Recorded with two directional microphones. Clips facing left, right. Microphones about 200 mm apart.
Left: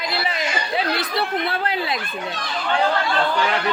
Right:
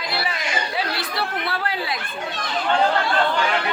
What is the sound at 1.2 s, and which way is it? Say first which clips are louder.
Chatter: left 1 dB; 20° left (ahead or behind).